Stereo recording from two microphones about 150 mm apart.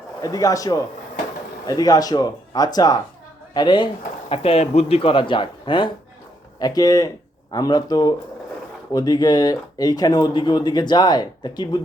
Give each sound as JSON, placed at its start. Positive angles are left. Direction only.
{"t": 0.2, "sound": "speech", "side_deg": 25}
{"t": 4.3, "sound": "speech", "side_deg": 40}